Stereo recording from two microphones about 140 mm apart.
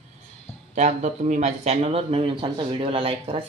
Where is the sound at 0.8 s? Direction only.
55° right (ahead or behind).